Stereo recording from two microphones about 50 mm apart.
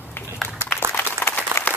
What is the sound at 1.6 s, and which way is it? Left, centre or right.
Applause, left.